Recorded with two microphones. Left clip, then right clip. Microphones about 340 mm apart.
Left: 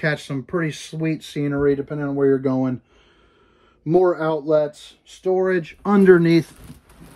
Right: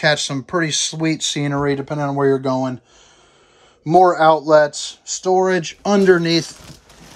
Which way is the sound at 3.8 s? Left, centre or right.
Centre.